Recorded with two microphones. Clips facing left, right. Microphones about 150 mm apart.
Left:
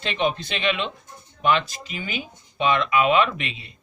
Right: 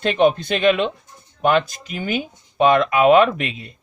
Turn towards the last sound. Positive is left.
turn(degrees=-45)  # may be behind; listen again after turning